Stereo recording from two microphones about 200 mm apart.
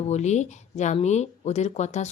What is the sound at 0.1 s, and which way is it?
Speech, 35° left (ahead or behind).